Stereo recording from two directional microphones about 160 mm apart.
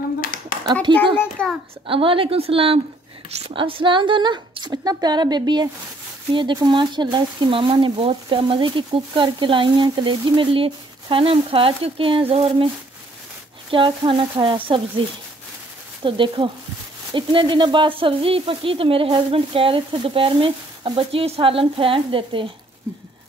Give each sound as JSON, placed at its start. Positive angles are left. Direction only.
{"t": 0.2, "sound": "a sound", "side_deg": 60}
{"t": 1.1, "sound": "a child's voice", "side_deg": 10}
{"t": 1.9, "sound": "a woman's voice", "side_deg": -35}
{"t": 13.7, "sound": "speech", "side_deg": -30}